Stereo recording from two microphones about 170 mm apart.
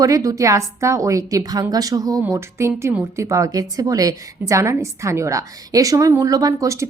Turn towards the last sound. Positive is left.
turn(degrees=-20)  # may be behind; listen again after turning